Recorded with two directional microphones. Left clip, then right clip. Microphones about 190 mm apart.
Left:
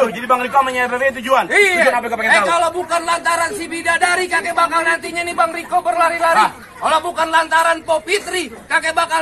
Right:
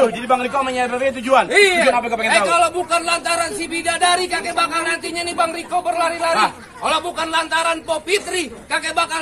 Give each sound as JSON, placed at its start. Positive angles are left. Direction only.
{"t": 0.0, "sound": "a man's voice", "side_deg": 35}
{"t": 0.5, "sound": "a man's voice", "side_deg": 25}
{"t": 0.8, "sound": "a man's voice", "side_deg": 35}
{"t": 1.5, "sound": "speech", "side_deg": -15}
{"t": 1.9, "sound": "speech", "side_deg": 15}
{"t": 2.5, "sound": "a man's voice", "side_deg": -20}